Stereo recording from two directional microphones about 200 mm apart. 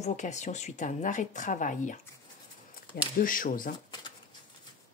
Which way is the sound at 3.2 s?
45° left (ahead or behind).